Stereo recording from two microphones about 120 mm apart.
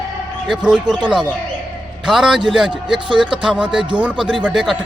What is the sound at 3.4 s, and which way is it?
A man's voice, 10° right (ahead or behind).